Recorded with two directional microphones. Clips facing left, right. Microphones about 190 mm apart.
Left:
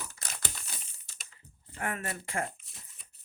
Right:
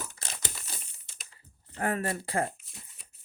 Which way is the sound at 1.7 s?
35° right (ahead or behind).